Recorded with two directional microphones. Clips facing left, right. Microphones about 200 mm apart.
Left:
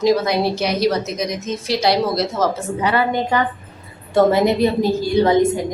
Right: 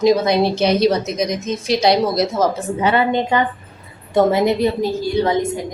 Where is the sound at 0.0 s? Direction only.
20° right (ahead or behind).